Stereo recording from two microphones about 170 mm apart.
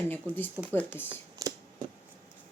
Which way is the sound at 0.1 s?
10° left (ahead or behind).